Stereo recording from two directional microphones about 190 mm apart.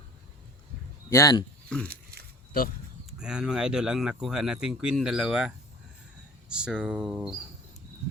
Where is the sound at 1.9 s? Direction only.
55° right (ahead or behind).